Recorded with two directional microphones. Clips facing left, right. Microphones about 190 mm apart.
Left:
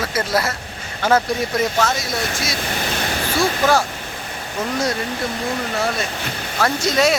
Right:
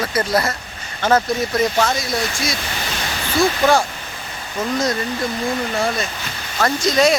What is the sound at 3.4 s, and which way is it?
Speech, 5° left (ahead or behind).